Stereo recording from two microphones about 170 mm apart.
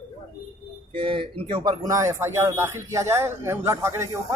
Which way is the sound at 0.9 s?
30° right (ahead or behind).